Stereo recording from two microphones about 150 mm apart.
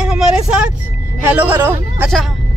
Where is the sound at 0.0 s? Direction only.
5° right (ahead or behind).